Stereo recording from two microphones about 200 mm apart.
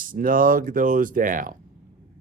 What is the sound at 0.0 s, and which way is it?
Speech, 45° right (ahead or behind).